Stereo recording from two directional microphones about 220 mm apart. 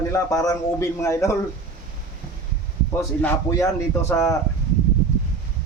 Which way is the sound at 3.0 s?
10° left (ahead or behind).